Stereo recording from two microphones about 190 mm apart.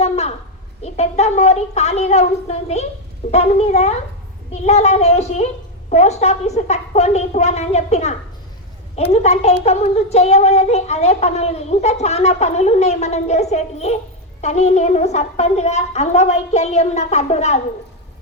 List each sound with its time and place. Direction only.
0.0 s a sound: 35° left (ahead or behind)
0.8 s a woman's voice: 35° left (ahead or behind)
9.2 s a woman's voice: 35° left (ahead or behind)